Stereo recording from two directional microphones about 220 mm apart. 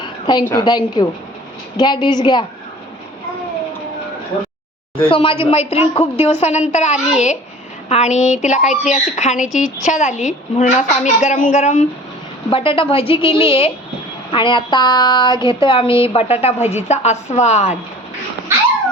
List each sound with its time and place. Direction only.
0.0 s a sound: 20° left (ahead or behind)
0.5 s speech: 20° left (ahead or behind)
4.9 s a woman's voice: 25° left (ahead or behind)